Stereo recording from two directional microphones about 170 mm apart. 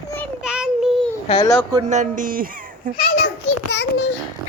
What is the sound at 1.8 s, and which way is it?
Speech, 45° right (ahead or behind).